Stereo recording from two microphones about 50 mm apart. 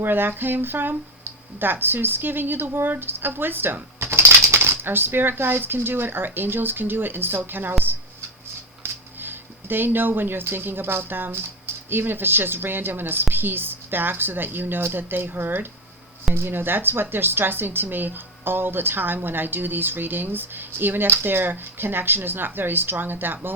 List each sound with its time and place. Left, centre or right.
0.0 s a woman's voice: right
4.0 s typing: right
4.4 s a woman's voice: right
8.8 s a woman's voice: right